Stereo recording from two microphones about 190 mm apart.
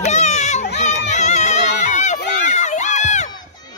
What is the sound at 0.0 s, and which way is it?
Children playing, 35° left (ahead or behind).